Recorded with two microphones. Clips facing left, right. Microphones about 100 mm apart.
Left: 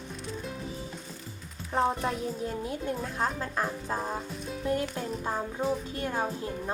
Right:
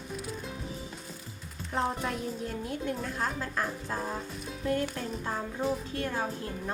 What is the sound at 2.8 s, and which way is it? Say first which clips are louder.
Speech: left 2 dB; 20° left (ahead or behind).